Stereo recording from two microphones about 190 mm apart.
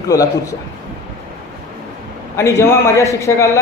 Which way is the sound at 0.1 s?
15° left (ahead or behind).